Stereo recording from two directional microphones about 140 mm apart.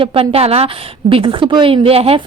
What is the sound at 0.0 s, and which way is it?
A woman's voice, 40° right (ahead or behind).